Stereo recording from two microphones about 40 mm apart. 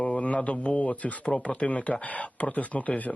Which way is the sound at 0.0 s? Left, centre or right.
Left.